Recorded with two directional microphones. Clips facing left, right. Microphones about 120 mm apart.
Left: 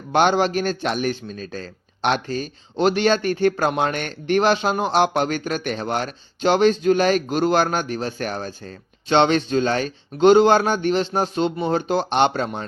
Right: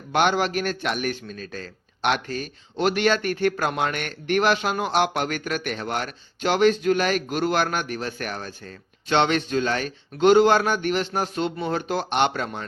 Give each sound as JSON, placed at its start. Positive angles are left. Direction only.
{"t": 0.1, "sound": "a man's voice", "side_deg": 30}